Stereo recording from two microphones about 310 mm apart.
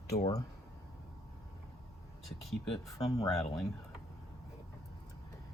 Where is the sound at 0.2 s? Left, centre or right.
Centre.